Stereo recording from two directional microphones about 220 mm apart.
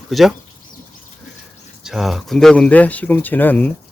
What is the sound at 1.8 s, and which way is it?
Speech, centre (ahead or behind).